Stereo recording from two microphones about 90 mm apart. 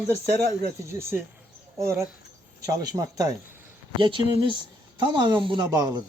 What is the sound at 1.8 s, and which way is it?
Speech, 35° right (ahead or behind).